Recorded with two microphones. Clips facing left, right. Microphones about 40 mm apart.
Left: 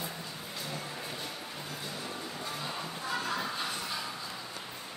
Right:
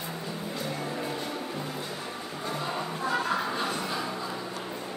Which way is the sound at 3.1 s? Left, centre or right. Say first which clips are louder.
Right 5 dB; right.